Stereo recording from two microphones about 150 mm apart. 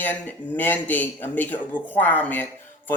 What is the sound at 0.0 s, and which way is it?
Speech, 10° left (ahead or behind).